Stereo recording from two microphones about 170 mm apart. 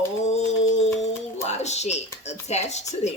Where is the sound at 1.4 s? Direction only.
40° left (ahead or behind).